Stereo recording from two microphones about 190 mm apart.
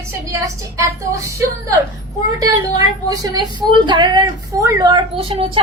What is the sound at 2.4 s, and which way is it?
A woman's voice, 20° right (ahead or behind).